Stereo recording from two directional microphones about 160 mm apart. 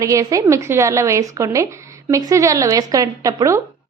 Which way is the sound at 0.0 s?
20° right (ahead or behind).